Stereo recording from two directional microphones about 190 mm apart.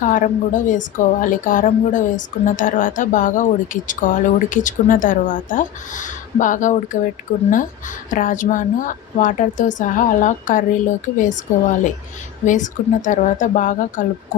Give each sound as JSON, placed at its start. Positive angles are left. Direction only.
{"t": 0.0, "sound": "a woman's voice", "side_deg": 45}
{"t": 12.5, "sound": "speech", "side_deg": 40}